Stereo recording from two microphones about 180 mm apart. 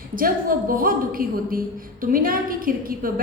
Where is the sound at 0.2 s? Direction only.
50° right (ahead or behind).